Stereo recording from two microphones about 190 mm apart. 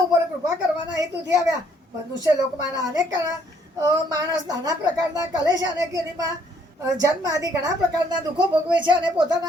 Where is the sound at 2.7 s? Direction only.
20° right (ahead or behind).